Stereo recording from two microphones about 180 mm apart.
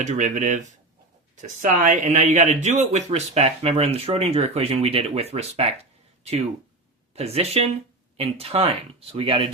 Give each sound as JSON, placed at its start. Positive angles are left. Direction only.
{"t": 0.0, "sound": "speech", "side_deg": -40}
{"t": 7.2, "sound": "speech", "side_deg": -35}